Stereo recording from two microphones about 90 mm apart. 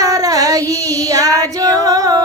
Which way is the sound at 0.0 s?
40° right (ahead or behind).